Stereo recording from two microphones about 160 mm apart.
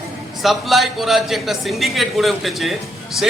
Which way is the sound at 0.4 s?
Centre (ahead or behind).